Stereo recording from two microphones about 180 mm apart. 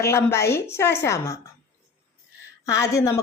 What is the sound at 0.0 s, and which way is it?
Speech, 15° left (ahead or behind).